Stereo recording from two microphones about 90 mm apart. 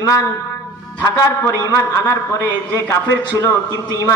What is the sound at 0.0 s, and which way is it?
Music, 40° left (ahead or behind).